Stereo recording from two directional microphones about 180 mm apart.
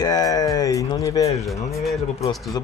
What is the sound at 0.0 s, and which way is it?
Speech, 20° left (ahead or behind).